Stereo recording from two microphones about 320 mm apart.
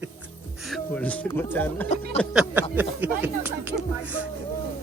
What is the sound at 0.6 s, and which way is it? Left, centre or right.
A man's voice, centre.